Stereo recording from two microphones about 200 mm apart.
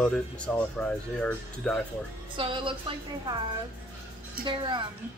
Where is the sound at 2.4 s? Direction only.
25° right (ahead or behind).